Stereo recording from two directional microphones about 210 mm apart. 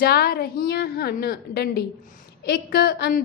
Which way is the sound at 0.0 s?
50° left (ahead or behind).